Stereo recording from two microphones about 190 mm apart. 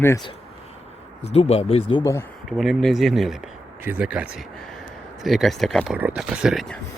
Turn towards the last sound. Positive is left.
turn(degrees=0)  # may be behind; listen again after turning